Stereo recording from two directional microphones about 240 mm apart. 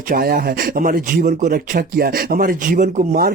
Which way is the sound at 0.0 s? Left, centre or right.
Right.